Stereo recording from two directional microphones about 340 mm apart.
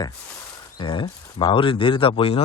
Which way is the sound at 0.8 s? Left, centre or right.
Centre.